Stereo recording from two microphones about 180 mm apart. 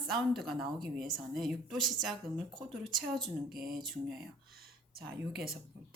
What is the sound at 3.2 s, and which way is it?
Speech, centre (ahead or behind).